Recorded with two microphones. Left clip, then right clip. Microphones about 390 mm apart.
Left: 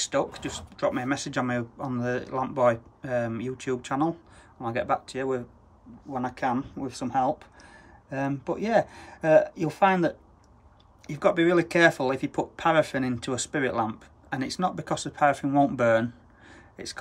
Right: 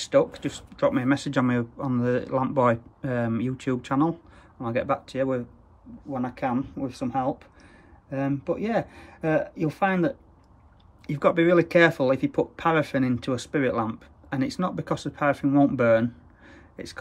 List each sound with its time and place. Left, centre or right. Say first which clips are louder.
0.0 s speech: right 5 dB; centre